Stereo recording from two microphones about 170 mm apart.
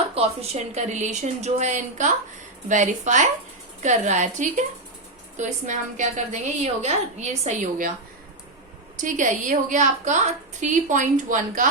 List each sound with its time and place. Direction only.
0.1 s a woman's voice: 40° right (ahead or behind)
9.0 s a woman's voice: 50° right (ahead or behind)